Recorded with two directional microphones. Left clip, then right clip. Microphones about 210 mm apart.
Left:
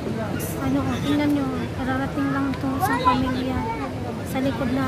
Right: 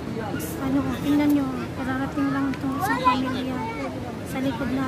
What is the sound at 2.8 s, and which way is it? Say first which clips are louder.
Speech: left 1 dB; 45° right (ahead or behind).